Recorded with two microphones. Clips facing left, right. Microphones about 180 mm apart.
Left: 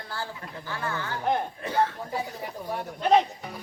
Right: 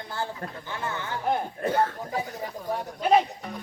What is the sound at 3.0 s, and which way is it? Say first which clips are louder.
Speech: even; 5° right (ahead or behind).